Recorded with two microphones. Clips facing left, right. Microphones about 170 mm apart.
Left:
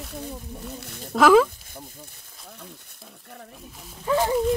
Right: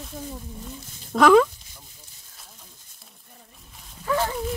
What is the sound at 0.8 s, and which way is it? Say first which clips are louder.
Speech: left 9 dB; 65° left (ahead or behind).